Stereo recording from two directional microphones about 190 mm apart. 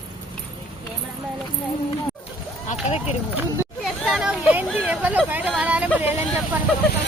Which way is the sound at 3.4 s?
Centre (ahead or behind).